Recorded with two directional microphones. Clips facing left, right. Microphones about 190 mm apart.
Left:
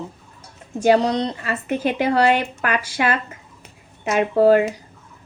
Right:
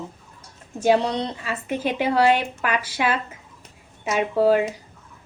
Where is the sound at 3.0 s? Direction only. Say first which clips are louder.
Left 1 dB; 5° right (ahead or behind).